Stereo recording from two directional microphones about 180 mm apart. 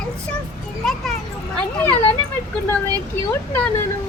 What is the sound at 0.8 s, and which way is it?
Speech, centre (ahead or behind).